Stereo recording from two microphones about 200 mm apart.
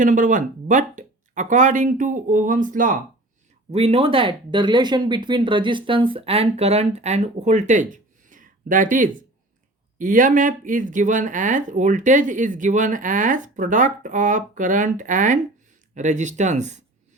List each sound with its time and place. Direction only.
0.0 s speech: 40° right (ahead or behind)
3.7 s speech: 30° right (ahead or behind)